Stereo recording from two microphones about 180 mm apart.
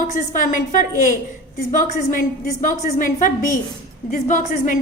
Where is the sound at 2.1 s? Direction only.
45° left (ahead or behind).